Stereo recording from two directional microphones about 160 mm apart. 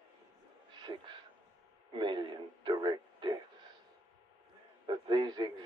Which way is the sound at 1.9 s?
30° right (ahead or behind).